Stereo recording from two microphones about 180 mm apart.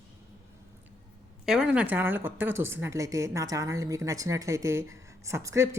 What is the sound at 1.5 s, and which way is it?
A woman's voice, 5° right (ahead or behind).